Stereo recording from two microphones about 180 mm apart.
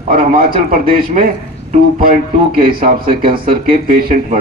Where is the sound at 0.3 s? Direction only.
50° right (ahead or behind).